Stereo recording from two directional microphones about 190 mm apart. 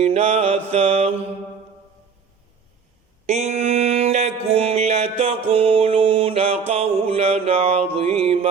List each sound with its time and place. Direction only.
0.0 s mantra: 35° right (ahead or behind)
3.2 s mantra: 35° right (ahead or behind)